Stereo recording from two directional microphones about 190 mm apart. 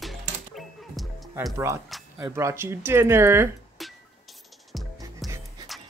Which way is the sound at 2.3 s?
15° right (ahead or behind).